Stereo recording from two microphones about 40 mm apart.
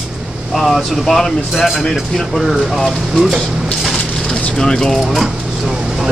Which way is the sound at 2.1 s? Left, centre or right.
Centre.